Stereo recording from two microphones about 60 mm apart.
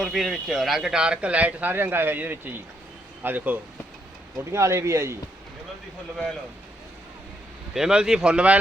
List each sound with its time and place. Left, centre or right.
0.0 s speech: centre; by 3.6 s right
4.5 s speech: right
7.7 s speech: centre